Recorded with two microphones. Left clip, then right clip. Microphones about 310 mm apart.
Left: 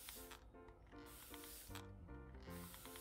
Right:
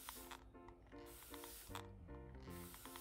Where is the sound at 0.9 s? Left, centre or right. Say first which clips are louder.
Right 1 dB; centre.